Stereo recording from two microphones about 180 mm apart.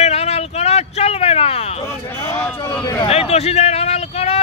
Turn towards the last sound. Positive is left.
turn(degrees=35)  # may be behind; listen again after turning